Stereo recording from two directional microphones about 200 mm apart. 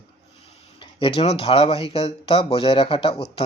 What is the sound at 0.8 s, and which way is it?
Speech, 25° left (ahead or behind).